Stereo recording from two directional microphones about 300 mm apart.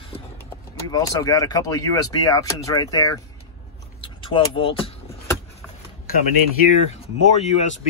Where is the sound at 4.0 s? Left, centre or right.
Centre.